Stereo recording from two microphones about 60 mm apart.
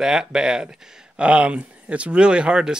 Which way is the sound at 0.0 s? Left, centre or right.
Centre.